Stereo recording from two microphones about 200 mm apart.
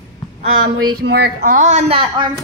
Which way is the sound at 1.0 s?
55° right (ahead or behind).